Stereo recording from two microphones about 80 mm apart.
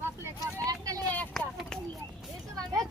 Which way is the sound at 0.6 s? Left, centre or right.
Right.